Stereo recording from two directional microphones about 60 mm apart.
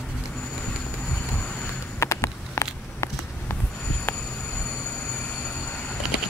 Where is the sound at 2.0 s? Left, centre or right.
Left.